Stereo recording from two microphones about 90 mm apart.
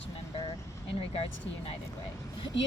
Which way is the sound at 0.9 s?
90° left.